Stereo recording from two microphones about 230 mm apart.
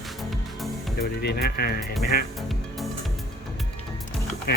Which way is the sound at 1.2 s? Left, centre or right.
Left.